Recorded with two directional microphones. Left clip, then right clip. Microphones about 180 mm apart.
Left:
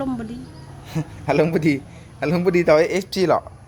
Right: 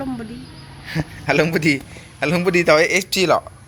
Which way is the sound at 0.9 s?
10° left (ahead or behind).